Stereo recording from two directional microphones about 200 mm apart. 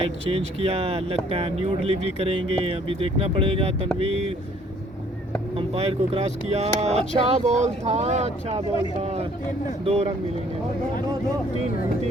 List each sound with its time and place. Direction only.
0.3 s speech: 30° right (ahead or behind)
5.5 s speech: 30° right (ahead or behind)